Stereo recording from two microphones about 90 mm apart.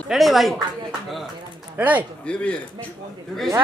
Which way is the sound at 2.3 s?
10° left (ahead or behind).